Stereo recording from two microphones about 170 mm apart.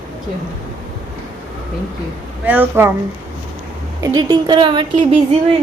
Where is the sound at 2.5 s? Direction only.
10° right (ahead or behind).